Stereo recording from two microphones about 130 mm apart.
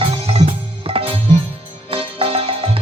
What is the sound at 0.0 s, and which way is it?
Music, 50° right (ahead or behind).